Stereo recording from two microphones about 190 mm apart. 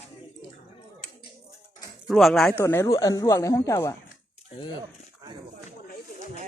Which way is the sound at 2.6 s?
15° left (ahead or behind).